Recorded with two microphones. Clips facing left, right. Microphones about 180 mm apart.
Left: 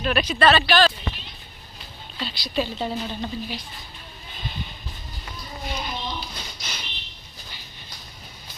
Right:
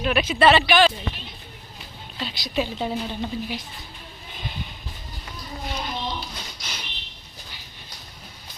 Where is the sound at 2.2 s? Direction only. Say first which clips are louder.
Even; 15° right (ahead or behind).